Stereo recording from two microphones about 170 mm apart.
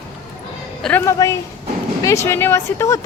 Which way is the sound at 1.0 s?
20° left (ahead or behind).